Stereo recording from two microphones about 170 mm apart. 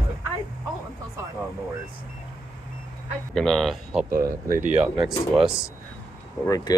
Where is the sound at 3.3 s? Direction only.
5° left (ahead or behind).